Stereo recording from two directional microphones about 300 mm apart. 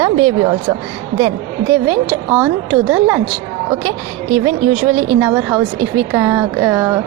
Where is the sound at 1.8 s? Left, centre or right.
Centre.